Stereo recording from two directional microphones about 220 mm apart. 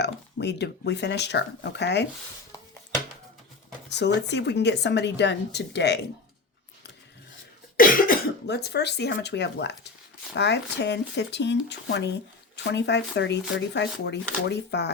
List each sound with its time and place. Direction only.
0.0 s speech: 50° left (ahead or behind)
3.8 s a woman's voice: 50° left (ahead or behind)
7.8 s a woman's voice: 40° left (ahead or behind)